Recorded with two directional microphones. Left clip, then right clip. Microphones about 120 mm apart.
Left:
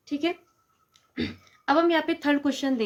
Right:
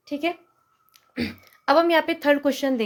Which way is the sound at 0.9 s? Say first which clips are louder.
Right 2 dB; 55° right (ahead or behind).